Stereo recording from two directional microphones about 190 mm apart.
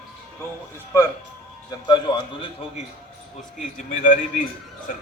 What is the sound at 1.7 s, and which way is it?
Speech, 25° left (ahead or behind).